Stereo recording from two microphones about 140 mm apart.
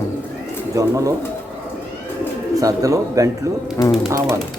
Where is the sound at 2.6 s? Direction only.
25° right (ahead or behind).